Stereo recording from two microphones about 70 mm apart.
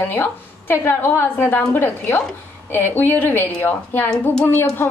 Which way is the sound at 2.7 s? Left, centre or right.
Left.